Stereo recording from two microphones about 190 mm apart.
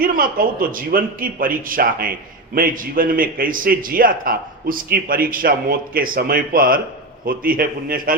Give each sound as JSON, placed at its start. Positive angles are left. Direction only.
{"t": 0.0, "sound": "a man's voice", "side_deg": -50}